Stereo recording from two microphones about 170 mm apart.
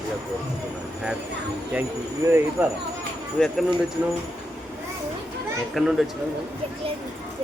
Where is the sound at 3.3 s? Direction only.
5° left (ahead or behind).